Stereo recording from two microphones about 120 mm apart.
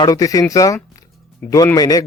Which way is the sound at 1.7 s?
30° left (ahead or behind).